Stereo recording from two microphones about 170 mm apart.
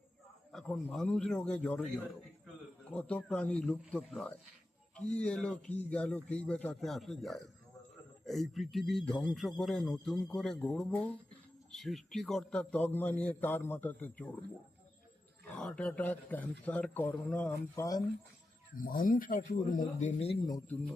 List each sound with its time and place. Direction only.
0.5 s speech: 5° left (ahead or behind)
2.9 s a man's voice: 5° left (ahead or behind)
15.5 s a man's voice: 5° left (ahead or behind)
18.8 s speech: 55° left (ahead or behind)